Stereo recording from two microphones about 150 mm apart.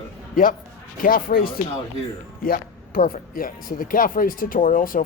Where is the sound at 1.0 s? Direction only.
75° left (ahead or behind).